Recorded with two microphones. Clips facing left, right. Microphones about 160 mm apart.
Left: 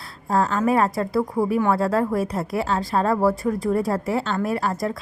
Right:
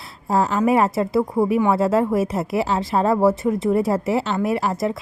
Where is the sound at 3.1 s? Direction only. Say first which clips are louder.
Right 3 dB; 25° right (ahead or behind).